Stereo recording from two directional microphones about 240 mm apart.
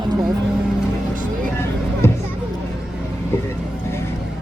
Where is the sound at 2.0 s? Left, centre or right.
Centre.